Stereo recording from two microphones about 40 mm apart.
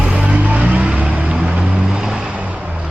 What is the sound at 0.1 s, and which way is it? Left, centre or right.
Vehicle, right.